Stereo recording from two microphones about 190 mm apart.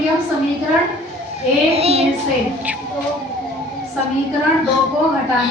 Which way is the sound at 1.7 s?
30° right (ahead or behind).